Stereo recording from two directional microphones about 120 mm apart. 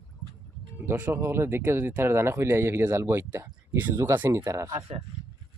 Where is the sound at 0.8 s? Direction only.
15° right (ahead or behind).